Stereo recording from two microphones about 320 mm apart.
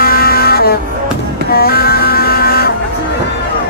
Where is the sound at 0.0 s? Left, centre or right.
Left.